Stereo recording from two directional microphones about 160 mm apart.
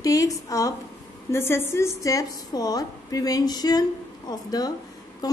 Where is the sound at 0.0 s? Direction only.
20° left (ahead or behind).